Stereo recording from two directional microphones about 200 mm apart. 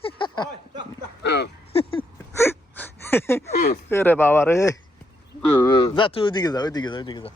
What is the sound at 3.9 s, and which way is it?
Speech, 10° left (ahead or behind).